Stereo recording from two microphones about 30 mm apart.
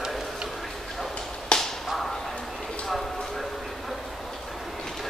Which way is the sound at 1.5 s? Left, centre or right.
Left.